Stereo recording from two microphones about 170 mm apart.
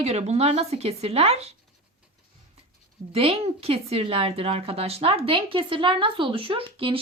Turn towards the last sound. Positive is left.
turn(degrees=-30)  # may be behind; listen again after turning